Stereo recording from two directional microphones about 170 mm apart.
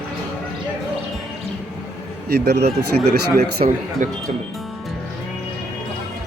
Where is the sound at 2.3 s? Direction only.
75° right (ahead or behind).